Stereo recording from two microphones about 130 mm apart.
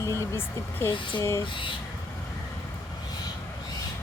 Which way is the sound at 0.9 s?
40° left (ahead or behind).